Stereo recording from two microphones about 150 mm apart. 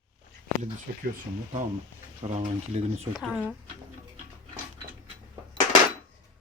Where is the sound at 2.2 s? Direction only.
50° right (ahead or behind).